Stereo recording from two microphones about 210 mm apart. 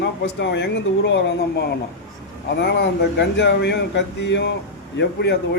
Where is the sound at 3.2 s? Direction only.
55° left (ahead or behind).